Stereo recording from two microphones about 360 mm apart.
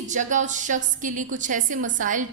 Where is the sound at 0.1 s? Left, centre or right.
Right.